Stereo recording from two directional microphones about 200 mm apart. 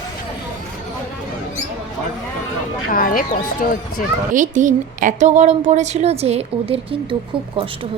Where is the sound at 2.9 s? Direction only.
45° left (ahead or behind).